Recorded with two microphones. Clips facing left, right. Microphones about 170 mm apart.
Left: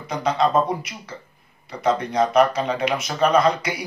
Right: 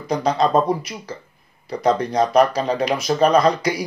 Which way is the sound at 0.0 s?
35° right (ahead or behind).